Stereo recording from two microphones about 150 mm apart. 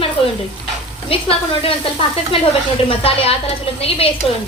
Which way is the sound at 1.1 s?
40° left (ahead or behind).